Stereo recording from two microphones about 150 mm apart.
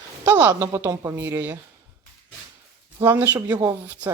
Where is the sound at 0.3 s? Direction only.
15° right (ahead or behind).